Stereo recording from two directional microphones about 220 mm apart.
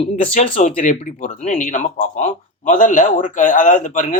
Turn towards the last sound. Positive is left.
turn(degrees=35)  # may be behind; listen again after turning